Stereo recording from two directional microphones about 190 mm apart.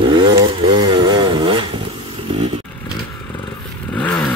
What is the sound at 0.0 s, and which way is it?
Chainsaw, 25° right (ahead or behind).